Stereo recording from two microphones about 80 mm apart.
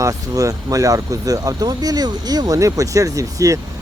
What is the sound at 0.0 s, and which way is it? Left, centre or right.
Speech, right.